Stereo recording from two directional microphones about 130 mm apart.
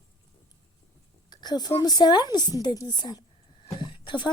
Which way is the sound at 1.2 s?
30° left (ahead or behind).